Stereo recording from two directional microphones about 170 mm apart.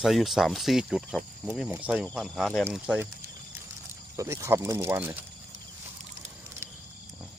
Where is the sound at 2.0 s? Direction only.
5° left (ahead or behind).